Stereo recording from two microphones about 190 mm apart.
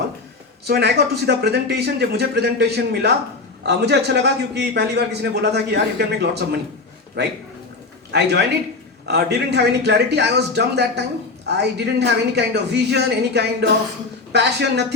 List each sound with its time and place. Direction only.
0.7 s a man's voice: 60° right (ahead or behind)